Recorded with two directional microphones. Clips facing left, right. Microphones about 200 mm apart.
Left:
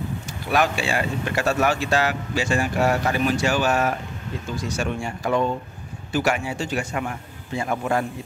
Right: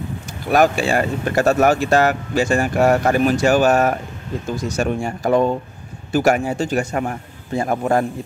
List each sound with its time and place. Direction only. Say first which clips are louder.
0.5 s a man's voice: right 6 dB; 45° right (ahead or behind)